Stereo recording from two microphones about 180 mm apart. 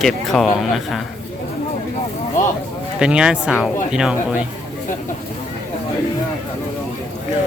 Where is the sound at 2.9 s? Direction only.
5° right (ahead or behind).